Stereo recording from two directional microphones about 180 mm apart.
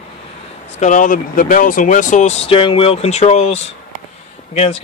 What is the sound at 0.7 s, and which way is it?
Speech, 45° left (ahead or behind).